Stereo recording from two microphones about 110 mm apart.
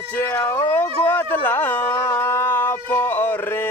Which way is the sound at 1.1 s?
20° left (ahead or behind).